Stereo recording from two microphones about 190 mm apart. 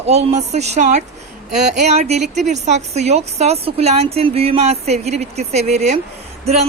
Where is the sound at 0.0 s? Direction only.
35° right (ahead or behind).